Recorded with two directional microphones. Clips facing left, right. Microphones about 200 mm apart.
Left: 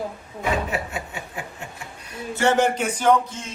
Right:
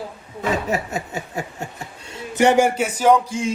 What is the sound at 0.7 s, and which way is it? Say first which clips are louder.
Snicker: right 5 dB; 40° right (ahead or behind).